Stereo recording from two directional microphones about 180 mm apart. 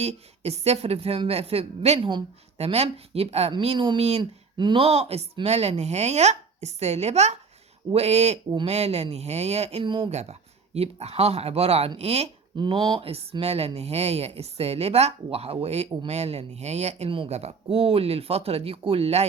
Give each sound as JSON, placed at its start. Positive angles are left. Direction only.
{"t": 0.0, "sound": "speech", "side_deg": -35}